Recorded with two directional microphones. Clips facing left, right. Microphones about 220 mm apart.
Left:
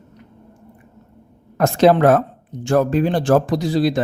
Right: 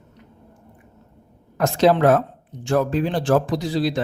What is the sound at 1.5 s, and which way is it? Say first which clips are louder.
Speech: left 3 dB; 55° left (ahead or behind).